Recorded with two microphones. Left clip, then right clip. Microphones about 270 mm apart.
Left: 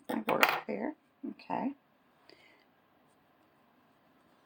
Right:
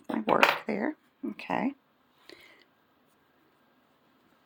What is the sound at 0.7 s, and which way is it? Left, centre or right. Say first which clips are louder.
Speech: right 5 dB; right.